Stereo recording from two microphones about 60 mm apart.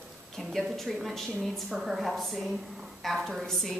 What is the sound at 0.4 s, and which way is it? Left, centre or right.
A woman's voice, centre.